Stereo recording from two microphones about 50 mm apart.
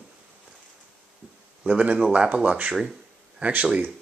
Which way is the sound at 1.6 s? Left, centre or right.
Right.